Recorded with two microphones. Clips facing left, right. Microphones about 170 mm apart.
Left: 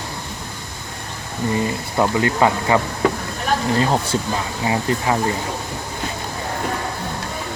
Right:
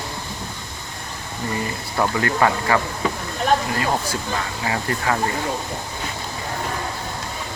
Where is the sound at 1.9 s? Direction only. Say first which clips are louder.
Left 2 dB; 20° left (ahead or behind).